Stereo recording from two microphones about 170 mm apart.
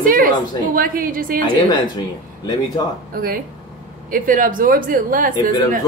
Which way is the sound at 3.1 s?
60° right (ahead or behind).